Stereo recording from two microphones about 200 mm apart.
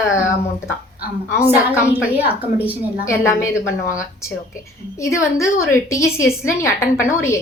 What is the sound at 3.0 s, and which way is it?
Speech, 15° left (ahead or behind).